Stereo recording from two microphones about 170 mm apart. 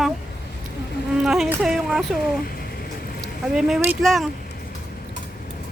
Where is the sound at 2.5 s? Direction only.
65° left (ahead or behind).